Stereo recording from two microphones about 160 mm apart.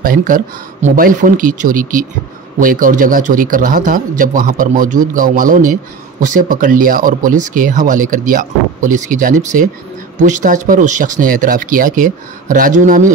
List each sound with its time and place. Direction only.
0.0 s speech: 60° right (ahead or behind)